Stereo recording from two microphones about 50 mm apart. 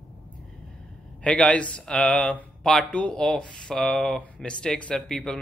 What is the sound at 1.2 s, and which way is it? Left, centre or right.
Speech, left.